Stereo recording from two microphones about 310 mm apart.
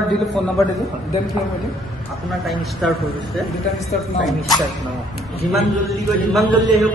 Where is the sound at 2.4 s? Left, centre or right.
Centre.